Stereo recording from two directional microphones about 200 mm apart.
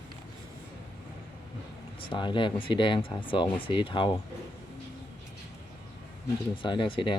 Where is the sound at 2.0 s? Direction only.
25° left (ahead or behind).